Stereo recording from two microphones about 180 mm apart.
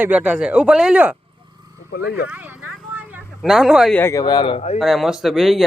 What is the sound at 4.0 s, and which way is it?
Speech, 15° left (ahead or behind).